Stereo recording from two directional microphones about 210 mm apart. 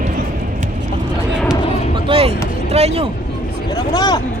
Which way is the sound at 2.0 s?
25° right (ahead or behind).